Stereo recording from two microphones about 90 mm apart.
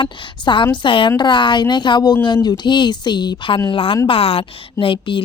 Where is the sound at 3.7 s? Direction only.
80° left.